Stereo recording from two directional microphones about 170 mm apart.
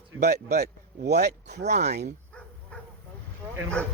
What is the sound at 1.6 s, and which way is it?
Speech, 40° right (ahead or behind).